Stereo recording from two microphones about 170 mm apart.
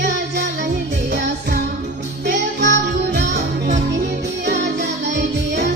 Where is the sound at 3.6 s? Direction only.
45° right (ahead or behind).